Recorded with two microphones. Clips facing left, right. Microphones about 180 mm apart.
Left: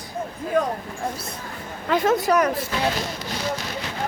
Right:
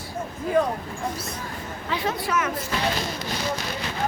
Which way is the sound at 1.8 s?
45° left (ahead or behind).